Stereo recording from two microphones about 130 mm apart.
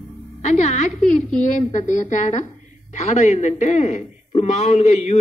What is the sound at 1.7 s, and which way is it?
A woman's voice, 75° left (ahead or behind).